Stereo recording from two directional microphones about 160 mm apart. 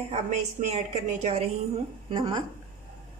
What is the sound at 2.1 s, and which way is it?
Speech, 30° right (ahead or behind).